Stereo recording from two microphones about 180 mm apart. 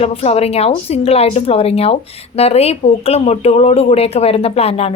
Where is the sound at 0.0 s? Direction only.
35° left (ahead or behind).